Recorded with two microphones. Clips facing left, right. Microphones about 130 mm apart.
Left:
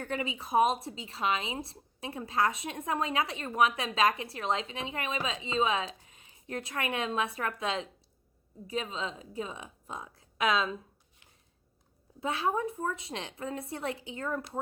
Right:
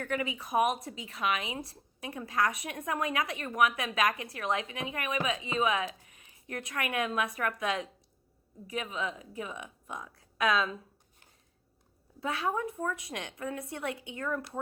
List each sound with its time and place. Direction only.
0.0 s a woman's voice: 30° left (ahead or behind)
12.2 s a woman's voice: 25° left (ahead or behind)